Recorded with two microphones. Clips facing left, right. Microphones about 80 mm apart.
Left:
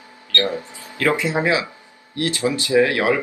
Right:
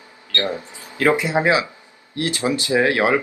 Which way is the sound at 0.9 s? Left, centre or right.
Right.